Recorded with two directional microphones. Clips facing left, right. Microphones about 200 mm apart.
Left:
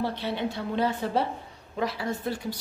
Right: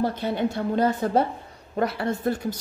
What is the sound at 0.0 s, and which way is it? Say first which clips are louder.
Speech: right 5 dB; 45° right (ahead or behind).